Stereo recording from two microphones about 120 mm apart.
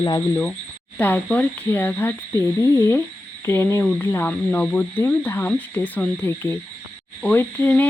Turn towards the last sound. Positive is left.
turn(degrees=15)  # may be behind; listen again after turning